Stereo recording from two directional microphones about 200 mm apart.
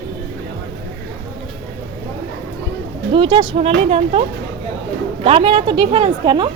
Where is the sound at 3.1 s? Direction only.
25° right (ahead or behind).